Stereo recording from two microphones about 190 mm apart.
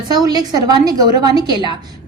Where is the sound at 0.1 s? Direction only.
20° right (ahead or behind).